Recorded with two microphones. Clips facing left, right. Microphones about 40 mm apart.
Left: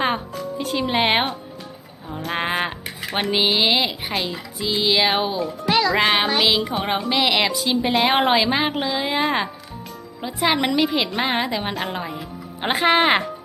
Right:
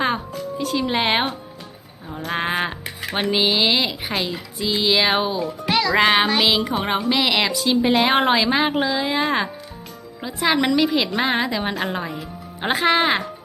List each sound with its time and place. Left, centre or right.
0.6 s music: left
2.0 s music: centre
4.1 s speech: centre
8.8 s music: centre
11.1 s speech: centre
12.6 s music: centre